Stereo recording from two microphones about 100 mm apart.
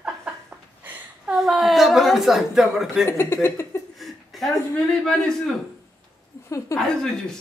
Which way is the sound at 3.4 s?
25° left (ahead or behind).